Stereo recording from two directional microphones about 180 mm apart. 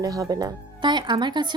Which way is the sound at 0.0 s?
20° right (ahead or behind).